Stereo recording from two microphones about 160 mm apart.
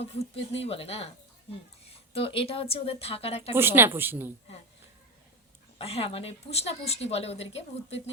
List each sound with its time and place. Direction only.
0.0 s a woman's voice: 40° left (ahead or behind)
2.1 s a woman's voice: 35° left (ahead or behind)
3.5 s a woman's voice: 15° right (ahead or behind)
5.8 s a woman's voice: 40° left (ahead or behind)